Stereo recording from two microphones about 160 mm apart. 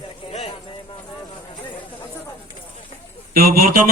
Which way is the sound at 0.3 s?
40° left (ahead or behind).